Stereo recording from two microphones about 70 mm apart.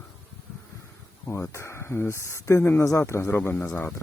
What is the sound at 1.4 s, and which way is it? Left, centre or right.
Speech, left.